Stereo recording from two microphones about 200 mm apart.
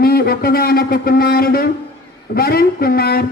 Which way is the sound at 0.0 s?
50° left (ahead or behind).